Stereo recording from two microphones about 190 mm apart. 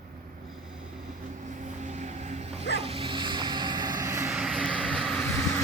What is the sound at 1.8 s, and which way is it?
Vehicle, 40° right (ahead or behind).